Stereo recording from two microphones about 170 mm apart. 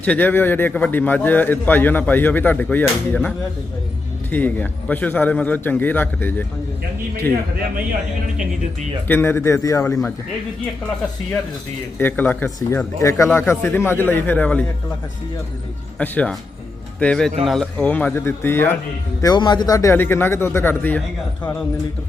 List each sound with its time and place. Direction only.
0.0 s a man's voice: 10° left (ahead or behind)
9.0 s a man's voice: 15° left (ahead or behind)
11.9 s a man's voice: 10° left (ahead or behind)
16.0 s a man's voice: 5° left (ahead or behind)
19.2 s a man's voice: 25° left (ahead or behind)